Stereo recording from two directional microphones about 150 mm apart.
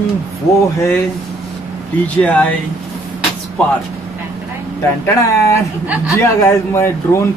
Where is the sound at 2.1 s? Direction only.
10° left (ahead or behind).